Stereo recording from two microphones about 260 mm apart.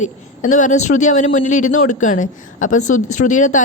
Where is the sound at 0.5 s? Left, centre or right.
Left.